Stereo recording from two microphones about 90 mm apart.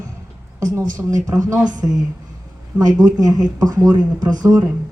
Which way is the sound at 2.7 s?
45° right (ahead or behind).